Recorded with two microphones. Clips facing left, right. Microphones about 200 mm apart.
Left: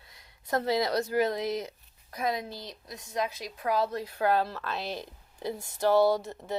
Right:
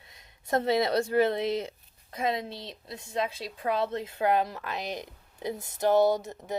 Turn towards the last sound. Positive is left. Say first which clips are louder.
# even
turn(degrees=-20)  # may be behind; listen again after turning